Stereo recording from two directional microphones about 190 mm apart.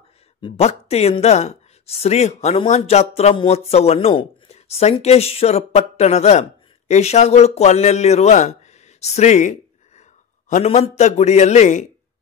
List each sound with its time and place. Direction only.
0.4 s a man's voice: 35° left (ahead or behind)